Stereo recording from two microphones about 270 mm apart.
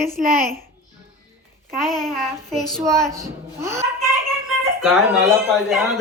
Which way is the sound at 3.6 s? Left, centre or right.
Centre.